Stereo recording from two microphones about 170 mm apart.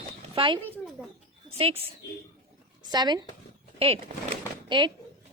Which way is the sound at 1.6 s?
35° right (ahead or behind).